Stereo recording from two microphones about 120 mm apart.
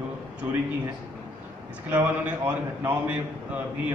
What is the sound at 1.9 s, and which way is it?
A man's voice, 15° right (ahead or behind).